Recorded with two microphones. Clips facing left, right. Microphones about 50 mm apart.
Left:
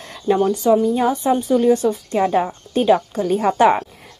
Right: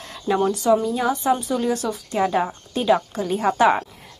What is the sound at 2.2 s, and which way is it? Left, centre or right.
Speech, centre.